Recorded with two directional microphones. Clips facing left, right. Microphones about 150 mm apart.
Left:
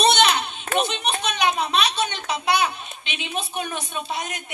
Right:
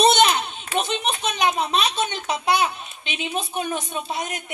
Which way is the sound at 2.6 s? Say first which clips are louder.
Right 1 dB; 40° right (ahead or behind).